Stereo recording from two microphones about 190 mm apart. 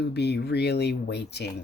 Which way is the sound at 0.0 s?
60° left (ahead or behind).